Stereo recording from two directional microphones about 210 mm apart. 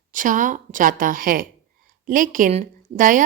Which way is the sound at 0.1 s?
40° right (ahead or behind).